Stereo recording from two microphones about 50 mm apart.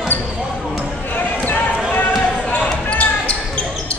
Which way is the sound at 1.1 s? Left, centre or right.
Left.